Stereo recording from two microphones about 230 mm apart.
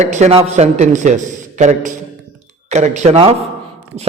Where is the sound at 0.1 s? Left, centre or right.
Right.